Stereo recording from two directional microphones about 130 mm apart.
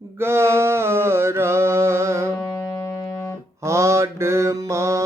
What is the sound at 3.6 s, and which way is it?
Mantra, 20° right (ahead or behind).